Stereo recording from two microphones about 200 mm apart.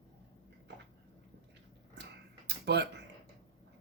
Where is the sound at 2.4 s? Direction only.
55° right (ahead or behind).